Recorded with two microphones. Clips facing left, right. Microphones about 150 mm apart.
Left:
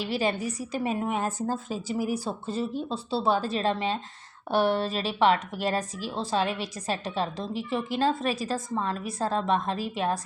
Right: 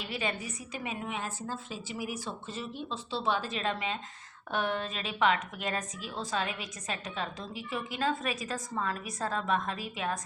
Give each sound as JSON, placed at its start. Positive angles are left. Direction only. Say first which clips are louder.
{"t": 0.1, "sound": "a woman's voice", "louder": "left 7 dB", "side_deg": 35}